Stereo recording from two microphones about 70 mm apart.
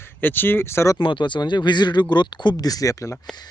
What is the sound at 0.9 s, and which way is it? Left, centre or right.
Speech, left.